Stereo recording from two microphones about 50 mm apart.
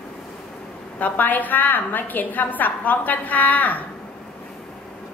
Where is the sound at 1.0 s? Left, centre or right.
Left.